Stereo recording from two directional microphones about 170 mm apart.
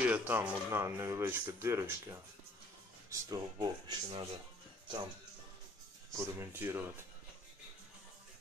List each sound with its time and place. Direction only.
0.0 s speech: 10° right (ahead or behind); by 4.3 s 25° right (ahead or behind)
6.1 s speech: 15° right (ahead or behind)